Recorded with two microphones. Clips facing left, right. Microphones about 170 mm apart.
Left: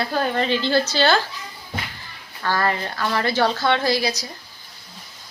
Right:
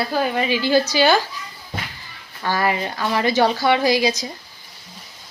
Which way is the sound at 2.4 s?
15° right (ahead or behind).